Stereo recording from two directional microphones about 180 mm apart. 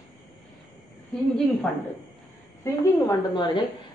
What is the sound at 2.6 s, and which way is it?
A woman's voice, 20° left (ahead or behind).